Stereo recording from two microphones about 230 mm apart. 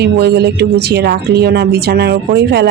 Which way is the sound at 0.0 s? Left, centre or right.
Right.